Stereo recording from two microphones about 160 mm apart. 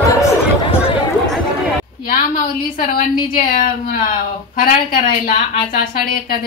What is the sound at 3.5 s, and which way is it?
Speech, 65° left (ahead or behind).